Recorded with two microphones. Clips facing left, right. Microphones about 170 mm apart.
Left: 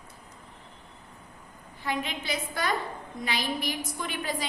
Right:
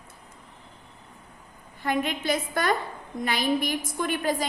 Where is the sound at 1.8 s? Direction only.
50° right (ahead or behind).